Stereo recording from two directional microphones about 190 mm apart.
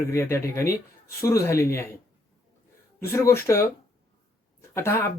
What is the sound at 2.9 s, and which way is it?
Speech, 15° left (ahead or behind).